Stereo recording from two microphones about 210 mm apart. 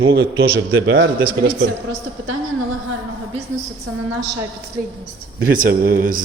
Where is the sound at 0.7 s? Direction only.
65° right (ahead or behind).